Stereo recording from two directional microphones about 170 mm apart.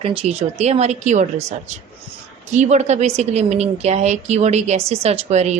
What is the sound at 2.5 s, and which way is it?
A woman's voice, 45° right (ahead or behind).